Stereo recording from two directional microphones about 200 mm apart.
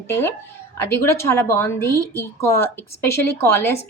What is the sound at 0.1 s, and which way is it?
A woman's voice, 10° left (ahead or behind).